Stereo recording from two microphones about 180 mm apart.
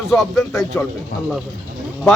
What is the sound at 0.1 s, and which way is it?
Speech, centre (ahead or behind).